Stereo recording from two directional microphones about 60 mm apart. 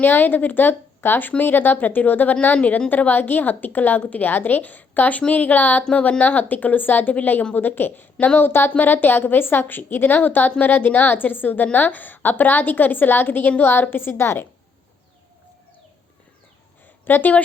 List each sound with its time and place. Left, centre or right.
0.0 s a woman's voice: left
17.1 s a woman's voice: left